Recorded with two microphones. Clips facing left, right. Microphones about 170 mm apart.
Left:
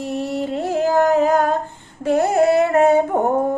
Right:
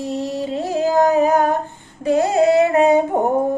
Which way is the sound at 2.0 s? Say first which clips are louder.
Even; 15° right (ahead or behind).